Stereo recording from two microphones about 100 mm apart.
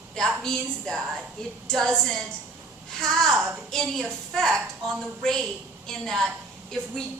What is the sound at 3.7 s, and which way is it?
A woman's voice, 5° left (ahead or behind).